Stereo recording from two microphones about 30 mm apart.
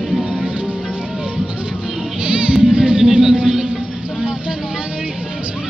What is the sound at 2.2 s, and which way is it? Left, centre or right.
Music, right.